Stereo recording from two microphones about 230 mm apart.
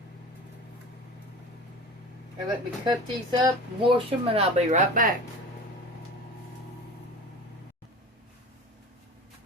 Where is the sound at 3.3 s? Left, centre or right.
Centre.